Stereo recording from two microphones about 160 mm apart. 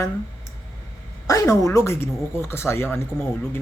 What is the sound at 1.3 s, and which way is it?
Speech, 20° left (ahead or behind).